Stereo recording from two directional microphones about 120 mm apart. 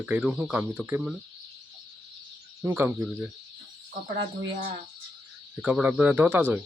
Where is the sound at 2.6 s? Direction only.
25° right (ahead or behind).